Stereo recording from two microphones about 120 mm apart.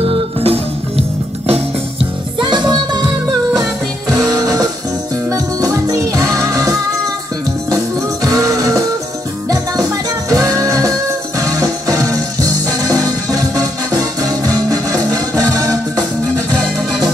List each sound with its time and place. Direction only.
0.0 s music: 55° right (ahead or behind)
2.4 s music: 40° right (ahead or behind)
4.1 s music: 30° right (ahead or behind)
7.7 s music: 30° right (ahead or behind)
10.3 s music: 30° right (ahead or behind)